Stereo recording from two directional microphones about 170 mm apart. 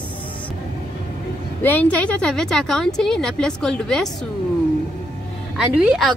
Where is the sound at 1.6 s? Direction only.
10° left (ahead or behind).